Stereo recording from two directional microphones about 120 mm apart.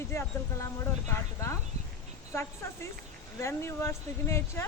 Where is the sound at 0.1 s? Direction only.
25° left (ahead or behind).